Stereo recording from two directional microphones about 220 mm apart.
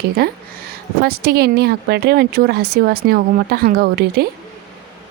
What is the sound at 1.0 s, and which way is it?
A woman's voice, 45° right (ahead or behind).